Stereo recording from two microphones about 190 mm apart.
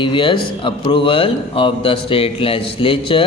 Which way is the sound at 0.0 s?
25° left (ahead or behind).